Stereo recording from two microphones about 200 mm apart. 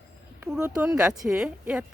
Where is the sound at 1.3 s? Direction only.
5° right (ahead or behind).